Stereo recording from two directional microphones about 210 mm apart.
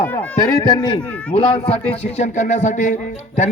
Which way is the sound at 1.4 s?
25° left (ahead or behind).